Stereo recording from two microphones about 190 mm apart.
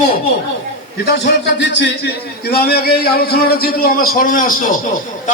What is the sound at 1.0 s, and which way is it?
A man's voice, 60° left (ahead or behind).